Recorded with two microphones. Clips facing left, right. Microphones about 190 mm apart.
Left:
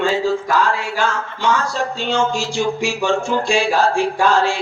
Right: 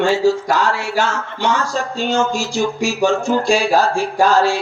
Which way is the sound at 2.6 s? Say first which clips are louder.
Right 3 dB; 40° right (ahead or behind).